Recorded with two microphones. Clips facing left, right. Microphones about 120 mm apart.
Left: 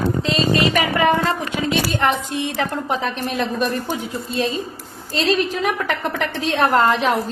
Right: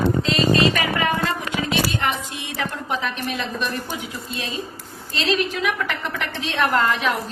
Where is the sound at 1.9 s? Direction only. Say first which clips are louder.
Left 5 dB; 35° left (ahead or behind).